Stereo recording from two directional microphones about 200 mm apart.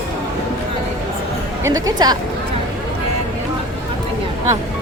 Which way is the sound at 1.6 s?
15° right (ahead or behind).